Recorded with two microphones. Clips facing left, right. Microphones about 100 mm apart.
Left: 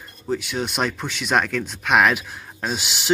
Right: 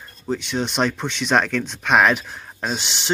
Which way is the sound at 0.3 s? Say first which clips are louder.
Right 1 dB; 5° left (ahead or behind).